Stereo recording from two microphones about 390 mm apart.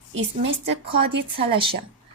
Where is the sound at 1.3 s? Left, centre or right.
Centre.